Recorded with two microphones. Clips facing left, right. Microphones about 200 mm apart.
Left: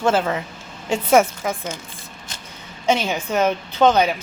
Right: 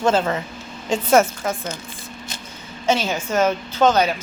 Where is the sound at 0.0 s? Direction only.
5° left (ahead or behind).